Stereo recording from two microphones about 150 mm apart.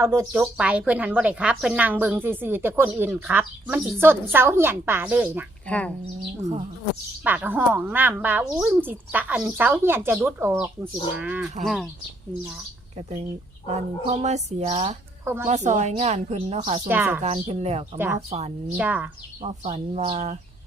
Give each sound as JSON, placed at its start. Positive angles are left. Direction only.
{"t": 0.0, "sound": "a woman's voice", "side_deg": -15}
{"t": 0.3, "sound": "a woman's voice", "side_deg": -5}
{"t": 5.6, "sound": "speech", "side_deg": 10}
{"t": 7.3, "sound": "a woman's voice", "side_deg": -10}
{"t": 11.6, "sound": "speech", "side_deg": 0}
{"t": 13.0, "sound": "a woman's voice", "side_deg": -45}
{"t": 15.2, "sound": "a woman's voice", "side_deg": -15}
{"t": 15.4, "sound": "a woman's voice", "side_deg": -50}
{"t": 16.8, "sound": "a woman's voice", "side_deg": -15}
{"t": 17.2, "sound": "a woman's voice", "side_deg": -45}
{"t": 17.9, "sound": "a woman's voice", "side_deg": -15}
{"t": 18.3, "sound": "a woman's voice", "side_deg": -45}
{"t": 18.8, "sound": "a woman's voice", "side_deg": -10}
{"t": 19.4, "sound": "a woman's voice", "side_deg": -50}